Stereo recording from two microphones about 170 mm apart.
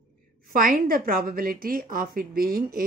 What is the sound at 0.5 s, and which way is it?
Speech, 60° right (ahead or behind).